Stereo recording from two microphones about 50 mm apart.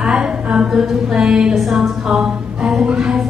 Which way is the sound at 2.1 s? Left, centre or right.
Centre.